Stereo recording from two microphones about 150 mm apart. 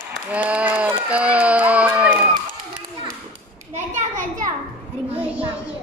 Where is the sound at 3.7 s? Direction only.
55° right (ahead or behind).